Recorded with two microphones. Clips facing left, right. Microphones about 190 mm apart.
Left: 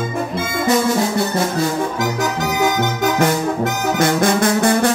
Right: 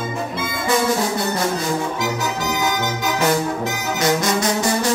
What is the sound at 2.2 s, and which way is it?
Music, 55° left (ahead or behind).